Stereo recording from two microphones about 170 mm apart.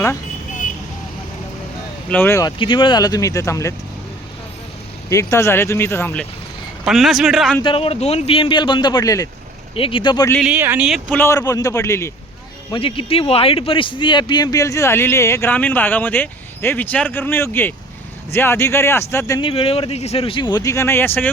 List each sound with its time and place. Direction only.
2.0 s speech: 10° left (ahead or behind)
2.6 s speech: 30° left (ahead or behind)
5.0 s speech: 15° left (ahead or behind)
6.8 s a man's voice: centre (ahead or behind)
7.6 s speech: 35° left (ahead or behind)
9.7 s speech: 30° left (ahead or behind)
10.4 s speech: 10° right (ahead or behind)
11.1 s speech: 15° left (ahead or behind)
12.7 s speech: 30° left (ahead or behind); by 19.4 s 15° left (ahead or behind)
19.4 s speech: 30° left (ahead or behind); by 21.2 s 10° left (ahead or behind)